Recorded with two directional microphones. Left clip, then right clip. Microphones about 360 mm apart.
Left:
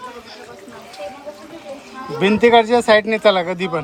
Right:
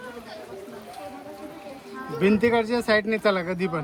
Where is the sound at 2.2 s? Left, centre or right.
Centre.